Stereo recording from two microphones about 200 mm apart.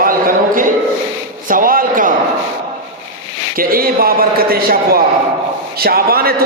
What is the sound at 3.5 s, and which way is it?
Speech, 45° right (ahead or behind).